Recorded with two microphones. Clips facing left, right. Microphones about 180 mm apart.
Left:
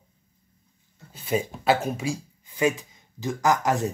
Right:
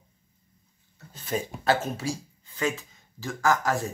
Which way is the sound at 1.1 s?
10° left (ahead or behind).